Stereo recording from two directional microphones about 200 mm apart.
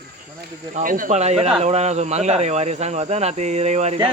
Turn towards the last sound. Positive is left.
turn(degrees=-35)  # may be behind; listen again after turning